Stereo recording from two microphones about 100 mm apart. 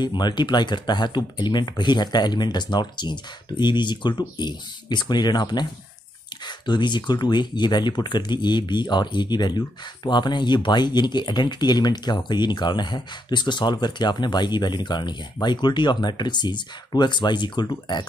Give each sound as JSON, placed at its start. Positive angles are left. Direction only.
{"t": 0.0, "sound": "speech", "side_deg": 50}